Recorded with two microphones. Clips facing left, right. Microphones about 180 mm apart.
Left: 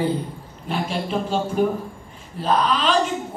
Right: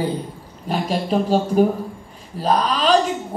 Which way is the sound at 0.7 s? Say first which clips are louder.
Right 4 dB; 40° right (ahead or behind).